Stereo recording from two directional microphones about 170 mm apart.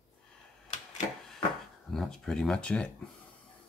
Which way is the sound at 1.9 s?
5° left (ahead or behind).